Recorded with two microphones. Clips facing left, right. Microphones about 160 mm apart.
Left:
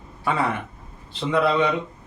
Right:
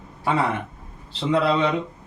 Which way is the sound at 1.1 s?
30° right (ahead or behind).